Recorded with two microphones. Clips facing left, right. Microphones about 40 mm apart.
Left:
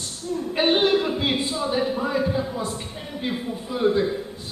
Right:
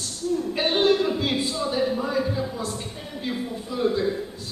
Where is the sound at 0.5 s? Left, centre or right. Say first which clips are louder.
Left 2 dB; centre.